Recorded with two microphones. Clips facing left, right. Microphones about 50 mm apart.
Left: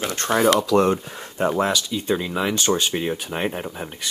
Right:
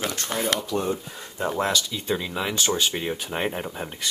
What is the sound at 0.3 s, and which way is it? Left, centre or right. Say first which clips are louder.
Speech: left 10 dB; left.